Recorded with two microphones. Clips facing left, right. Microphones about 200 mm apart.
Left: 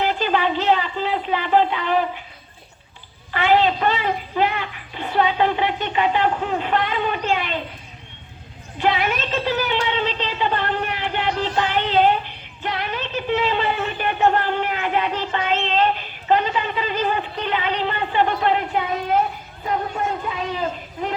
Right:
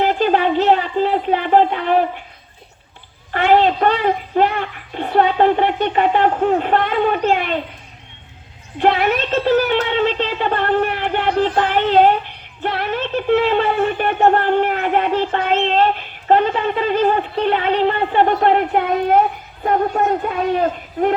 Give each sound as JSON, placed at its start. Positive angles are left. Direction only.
{"t": 0.0, "sound": "a sound", "side_deg": -45}
{"t": 3.3, "sound": "a woman's voice", "side_deg": -55}
{"t": 9.3, "sound": "a woman's voice", "side_deg": -45}